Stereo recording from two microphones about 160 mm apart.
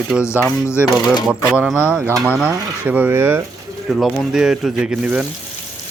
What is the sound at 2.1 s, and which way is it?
Mechanisms, 15° right (ahead or behind).